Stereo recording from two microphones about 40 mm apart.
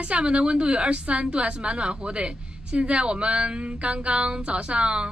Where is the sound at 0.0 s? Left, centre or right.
Right.